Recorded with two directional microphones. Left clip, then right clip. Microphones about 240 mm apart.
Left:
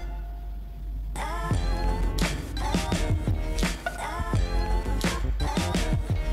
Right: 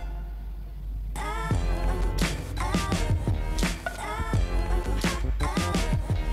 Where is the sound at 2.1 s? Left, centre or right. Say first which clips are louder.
Even; centre.